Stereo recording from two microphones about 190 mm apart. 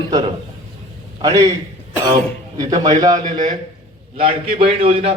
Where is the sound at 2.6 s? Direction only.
20° right (ahead or behind).